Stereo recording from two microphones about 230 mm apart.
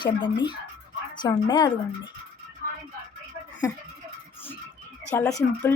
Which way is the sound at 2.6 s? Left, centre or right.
Right.